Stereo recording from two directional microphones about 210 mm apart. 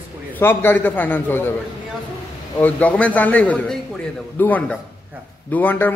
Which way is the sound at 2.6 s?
5° left (ahead or behind).